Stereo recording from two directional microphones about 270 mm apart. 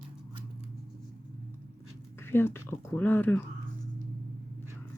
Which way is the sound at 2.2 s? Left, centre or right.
Centre.